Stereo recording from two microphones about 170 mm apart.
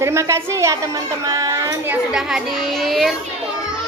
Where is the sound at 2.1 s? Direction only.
5° right (ahead or behind).